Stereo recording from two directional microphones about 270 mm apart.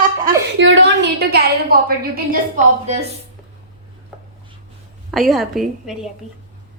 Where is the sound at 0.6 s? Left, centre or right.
Right.